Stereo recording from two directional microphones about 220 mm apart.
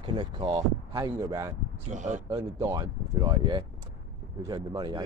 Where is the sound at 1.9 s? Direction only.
35° right (ahead or behind).